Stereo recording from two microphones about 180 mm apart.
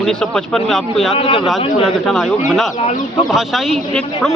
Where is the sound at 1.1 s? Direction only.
30° left (ahead or behind).